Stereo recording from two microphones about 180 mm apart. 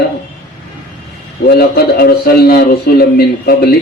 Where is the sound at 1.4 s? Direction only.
60° left (ahead or behind).